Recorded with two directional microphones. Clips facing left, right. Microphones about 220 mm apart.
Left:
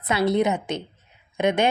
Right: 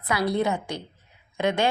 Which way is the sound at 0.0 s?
25° left (ahead or behind).